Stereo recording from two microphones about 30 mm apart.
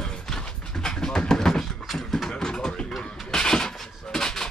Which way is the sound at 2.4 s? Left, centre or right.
Left.